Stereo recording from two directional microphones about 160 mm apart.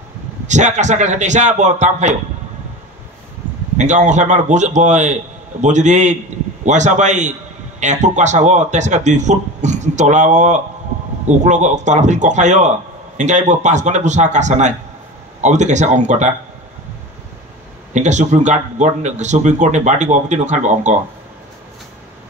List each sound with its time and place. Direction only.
0.5 s a man's voice: 50° right (ahead or behind)
3.7 s a man's voice: 50° right (ahead or behind)
17.9 s a man's voice: 50° right (ahead or behind)